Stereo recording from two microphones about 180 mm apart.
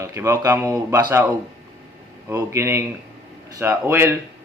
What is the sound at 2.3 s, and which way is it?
Speech, 15° right (ahead or behind).